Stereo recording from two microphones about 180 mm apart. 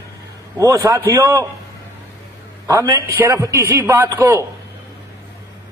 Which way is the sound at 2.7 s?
15° right (ahead or behind).